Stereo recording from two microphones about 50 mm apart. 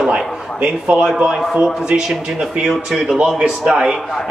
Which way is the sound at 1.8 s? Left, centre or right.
Centre.